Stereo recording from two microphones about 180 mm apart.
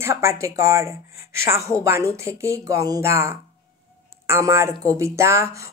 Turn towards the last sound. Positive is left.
turn(degrees=-15)  # may be behind; listen again after turning